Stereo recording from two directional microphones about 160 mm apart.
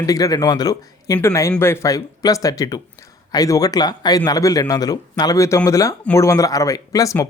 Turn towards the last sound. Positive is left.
turn(degrees=20)  # may be behind; listen again after turning